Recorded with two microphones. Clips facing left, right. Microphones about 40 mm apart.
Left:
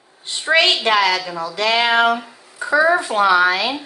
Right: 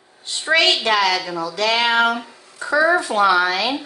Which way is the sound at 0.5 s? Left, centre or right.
Left.